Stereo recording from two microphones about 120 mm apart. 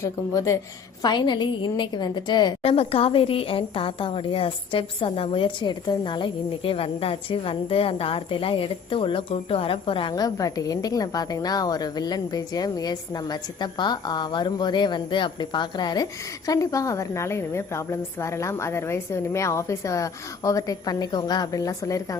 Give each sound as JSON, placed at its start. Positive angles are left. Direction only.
{"t": 0.0, "sound": "a woman's voice", "side_deg": 25}
{"t": 1.0, "sound": "a woman's voice", "side_deg": 40}
{"t": 2.6, "sound": "a woman's voice", "side_deg": 55}
{"t": 10.2, "sound": "a woman's voice", "side_deg": 30}